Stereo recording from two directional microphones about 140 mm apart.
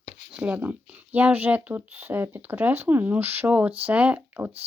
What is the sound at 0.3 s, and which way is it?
Speech, 10° right (ahead or behind).